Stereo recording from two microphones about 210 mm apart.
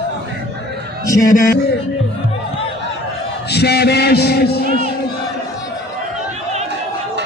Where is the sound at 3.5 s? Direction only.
50° left (ahead or behind).